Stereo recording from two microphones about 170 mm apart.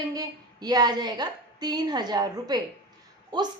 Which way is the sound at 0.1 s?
20° right (ahead or behind).